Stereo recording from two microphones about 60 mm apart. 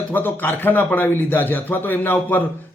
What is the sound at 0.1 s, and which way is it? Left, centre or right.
Speech, left.